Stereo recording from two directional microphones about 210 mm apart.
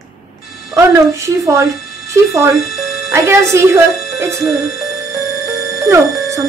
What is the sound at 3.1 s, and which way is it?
Speech, 15° right (ahead or behind).